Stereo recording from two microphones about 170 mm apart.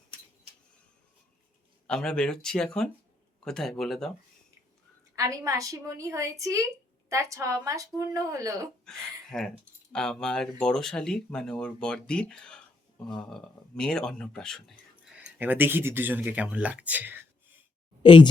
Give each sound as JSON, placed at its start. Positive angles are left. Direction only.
{"t": 1.9, "sound": "speech", "side_deg": 5}
{"t": 5.1, "sound": "a woman's voice", "side_deg": -20}
{"t": 8.8, "sound": "speech", "side_deg": 5}
{"t": 15.4, "sound": "speech", "side_deg": -10}
{"t": 18.0, "sound": "speech", "side_deg": 30}